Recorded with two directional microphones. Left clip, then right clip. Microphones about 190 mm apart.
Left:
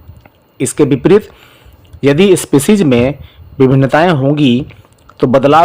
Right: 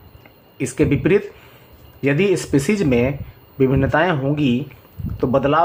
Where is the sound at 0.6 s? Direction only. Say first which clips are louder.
Left 8 dB; 55° left (ahead or behind).